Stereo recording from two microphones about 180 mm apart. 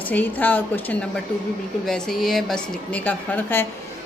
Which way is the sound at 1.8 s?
Centre (ahead or behind).